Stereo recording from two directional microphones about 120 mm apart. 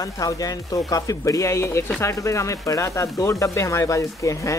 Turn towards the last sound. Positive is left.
turn(degrees=25)  # may be behind; listen again after turning